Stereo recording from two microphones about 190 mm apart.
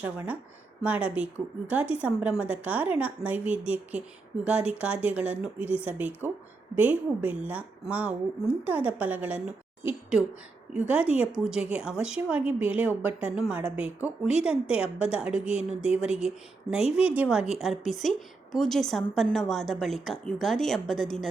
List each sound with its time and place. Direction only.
0.0 s a woman's voice: 10° right (ahead or behind)
16.8 s speech: 30° left (ahead or behind)
17.2 s a woman's voice: 5° right (ahead or behind)